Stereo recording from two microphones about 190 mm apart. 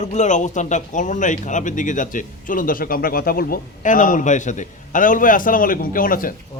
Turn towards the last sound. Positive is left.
turn(degrees=45)  # may be behind; listen again after turning